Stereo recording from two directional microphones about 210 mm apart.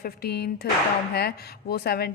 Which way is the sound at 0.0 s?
50° left (ahead or behind).